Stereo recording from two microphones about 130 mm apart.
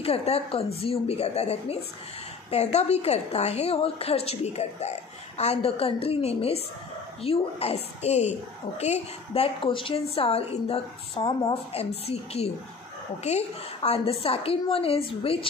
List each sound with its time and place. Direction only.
0.0 s a woman's voice: 50° left (ahead or behind)